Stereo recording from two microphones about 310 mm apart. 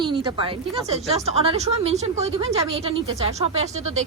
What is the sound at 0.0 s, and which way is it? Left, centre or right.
A woman's voice, centre.